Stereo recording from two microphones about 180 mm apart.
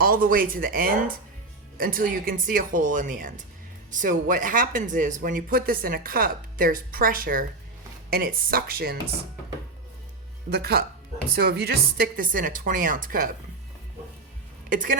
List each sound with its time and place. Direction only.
0.0 s speech: 55° right (ahead or behind)
10.5 s speech: 60° right (ahead or behind)
14.7 s speech: 50° right (ahead or behind)